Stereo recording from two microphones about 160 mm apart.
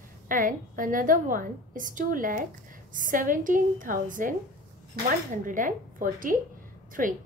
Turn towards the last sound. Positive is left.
turn(degrees=-60)  # may be behind; listen again after turning